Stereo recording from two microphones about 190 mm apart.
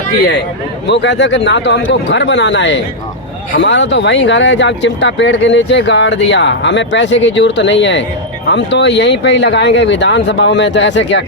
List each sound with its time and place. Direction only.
0.9 s speech: 70° left (ahead or behind)